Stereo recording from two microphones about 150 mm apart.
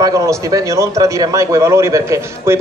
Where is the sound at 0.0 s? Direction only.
20° right (ahead or behind).